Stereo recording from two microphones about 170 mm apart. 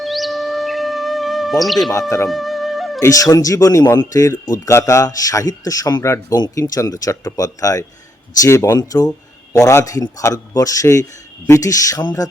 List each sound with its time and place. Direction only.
0.0 s music: centre (ahead or behind)
1.9 s speech: 20° left (ahead or behind)
2.3 s music: centre (ahead or behind)
3.0 s speech: 20° left (ahead or behind)